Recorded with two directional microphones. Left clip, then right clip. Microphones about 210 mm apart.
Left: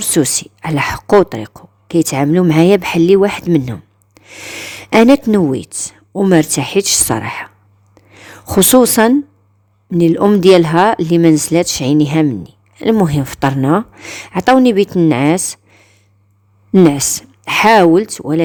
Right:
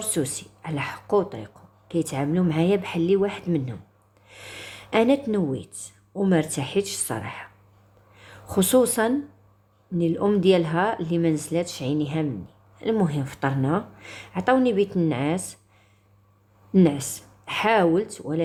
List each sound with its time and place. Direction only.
0.0 s a woman's voice: 50° left (ahead or behind)